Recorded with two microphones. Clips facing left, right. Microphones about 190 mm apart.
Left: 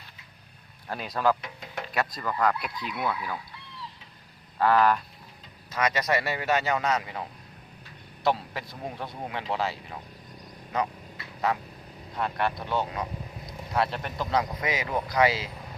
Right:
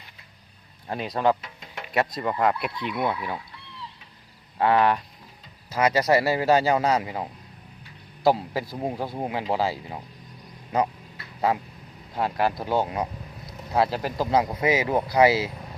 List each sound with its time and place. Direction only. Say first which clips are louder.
1.1 s speech: right 2 dB; 20° right (ahead or behind)
4.5 s speech: right 1 dB; 25° right (ahead or behind)
11.3 s speech: right 4 dB; 30° right (ahead or behind)